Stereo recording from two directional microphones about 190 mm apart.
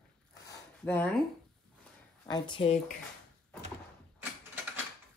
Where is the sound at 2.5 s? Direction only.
30° left (ahead or behind).